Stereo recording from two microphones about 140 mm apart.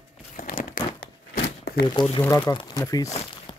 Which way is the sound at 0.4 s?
75° left (ahead or behind).